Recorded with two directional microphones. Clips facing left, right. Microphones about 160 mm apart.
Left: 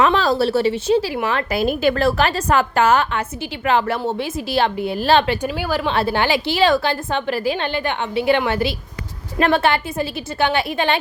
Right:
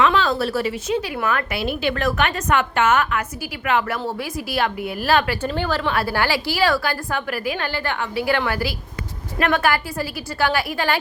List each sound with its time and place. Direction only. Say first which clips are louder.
0.0 s speech: left 2 dB; 35° left (ahead or behind)
1.5 s a woman's voice: left 5 dB; 45° left (ahead or behind)
2.0 s a woman's voice: left 3 dB; 35° left (ahead or behind)
5.5 s a woman's voice: left 1 dB; 10° left (ahead or behind)
5.8 s a woman's voice: left 3 dB; 25° left (ahead or behind)